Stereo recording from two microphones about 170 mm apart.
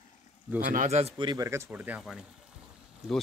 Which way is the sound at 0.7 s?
40° right (ahead or behind).